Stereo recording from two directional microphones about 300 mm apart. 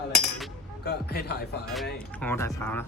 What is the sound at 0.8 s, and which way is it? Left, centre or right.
Speech, left.